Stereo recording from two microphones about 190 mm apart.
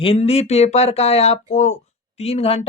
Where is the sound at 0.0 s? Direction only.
30° left (ahead or behind).